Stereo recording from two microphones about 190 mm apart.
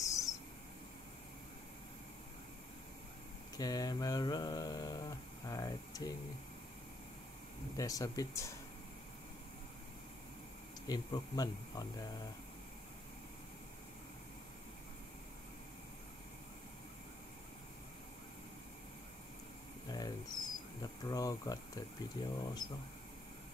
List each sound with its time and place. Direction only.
0.0 s a sound: 15° left (ahead or behind)
3.5 s speech: 20° left (ahead or behind)
7.7 s speech: 20° left (ahead or behind)
10.9 s speech: 20° left (ahead or behind)
19.9 s bird: 20° left (ahead or behind)
20.8 s speech: 20° left (ahead or behind)